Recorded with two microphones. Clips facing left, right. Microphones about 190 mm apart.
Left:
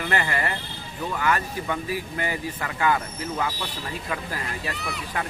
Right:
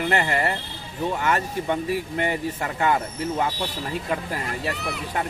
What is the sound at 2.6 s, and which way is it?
Speech, 30° right (ahead or behind).